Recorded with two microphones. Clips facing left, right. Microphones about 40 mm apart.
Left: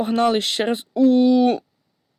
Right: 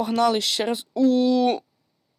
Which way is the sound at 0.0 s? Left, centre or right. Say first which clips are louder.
Left 2 dB; left.